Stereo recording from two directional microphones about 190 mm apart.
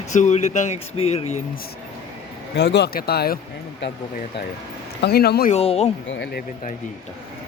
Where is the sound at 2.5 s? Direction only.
65° left (ahead or behind).